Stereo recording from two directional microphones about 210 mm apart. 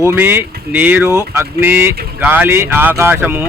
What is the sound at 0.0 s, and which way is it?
Speech, 10° right (ahead or behind).